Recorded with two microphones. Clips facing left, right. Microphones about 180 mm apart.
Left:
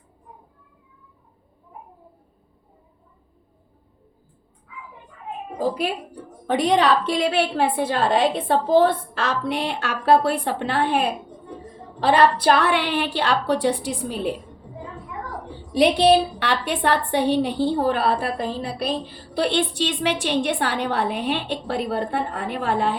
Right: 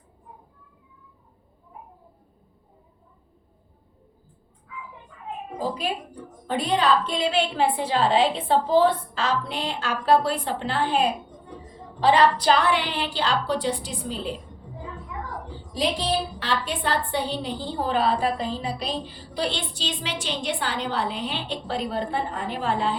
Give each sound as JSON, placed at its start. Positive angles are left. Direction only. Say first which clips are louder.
{"t": 6.5, "sound": "a woman's voice", "louder": "left 4 dB", "side_deg": 75}
{"t": 12.0, "sound": "a woman's voice", "louder": "left 2 dB", "side_deg": 60}
{"t": 15.7, "sound": "a woman's voice", "louder": "left 9 dB", "side_deg": 70}